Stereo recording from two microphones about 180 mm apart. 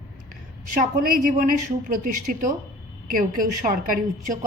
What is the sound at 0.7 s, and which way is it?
A woman's voice, 45° right (ahead or behind).